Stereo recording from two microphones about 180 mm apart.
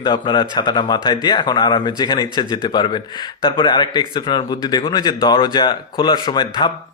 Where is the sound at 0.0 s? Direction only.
25° left (ahead or behind).